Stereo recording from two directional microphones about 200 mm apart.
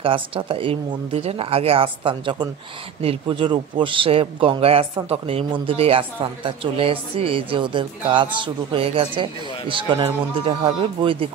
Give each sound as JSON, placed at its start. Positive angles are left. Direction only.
{"t": 0.0, "sound": "speech", "side_deg": -25}